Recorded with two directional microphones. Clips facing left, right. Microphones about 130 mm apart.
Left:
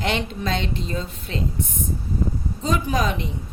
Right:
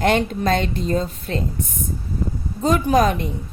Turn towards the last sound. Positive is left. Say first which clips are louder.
# right 6 dB
turn(degrees=-50)  # may be behind; listen again after turning